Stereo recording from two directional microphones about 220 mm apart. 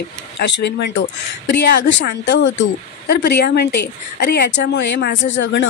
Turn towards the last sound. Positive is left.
turn(degrees=55)  # may be behind; listen again after turning